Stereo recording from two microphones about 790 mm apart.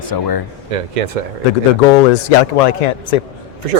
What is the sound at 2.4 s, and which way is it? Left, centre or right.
Speech, left.